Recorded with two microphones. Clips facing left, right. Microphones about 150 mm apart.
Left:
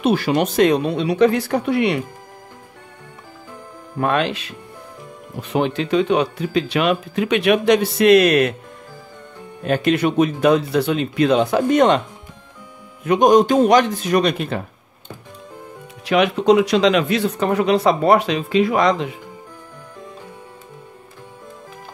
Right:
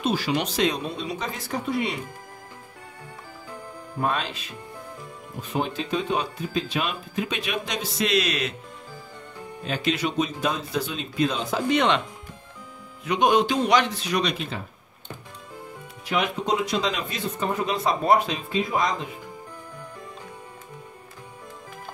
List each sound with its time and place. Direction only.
0.0 s speech: 60° left (ahead or behind)
4.0 s speech: 70° left (ahead or behind); by 8.5 s 55° left (ahead or behind)
9.6 s speech: 55° left (ahead or behind)
13.0 s speech: 45° left (ahead or behind)
16.1 s speech: 80° left